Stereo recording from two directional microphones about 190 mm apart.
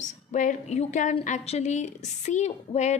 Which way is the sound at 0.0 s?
40° left (ahead or behind).